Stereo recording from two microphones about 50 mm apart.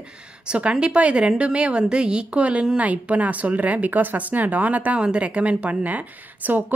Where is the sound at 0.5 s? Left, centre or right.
Right.